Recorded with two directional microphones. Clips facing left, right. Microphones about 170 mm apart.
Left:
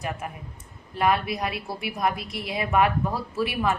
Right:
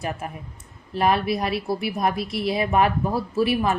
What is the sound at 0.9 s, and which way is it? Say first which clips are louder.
A woman's voice: right 3 dB; 30° right (ahead or behind).